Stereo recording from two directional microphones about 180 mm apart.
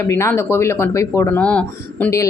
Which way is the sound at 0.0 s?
15° left (ahead or behind).